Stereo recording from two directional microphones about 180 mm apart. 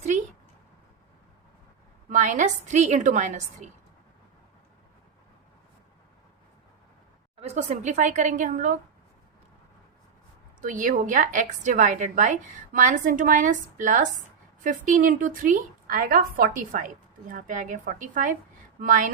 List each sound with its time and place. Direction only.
2.0 s a woman's voice: 45° right (ahead or behind)
7.4 s a woman's voice: 40° right (ahead or behind)
10.6 s a woman's voice: 45° right (ahead or behind)